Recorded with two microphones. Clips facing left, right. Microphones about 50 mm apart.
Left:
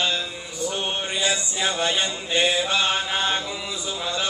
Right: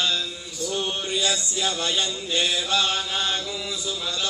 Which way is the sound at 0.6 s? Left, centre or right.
Left.